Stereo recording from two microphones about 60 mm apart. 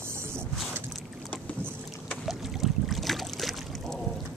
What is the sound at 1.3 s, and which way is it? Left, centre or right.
Boat, left.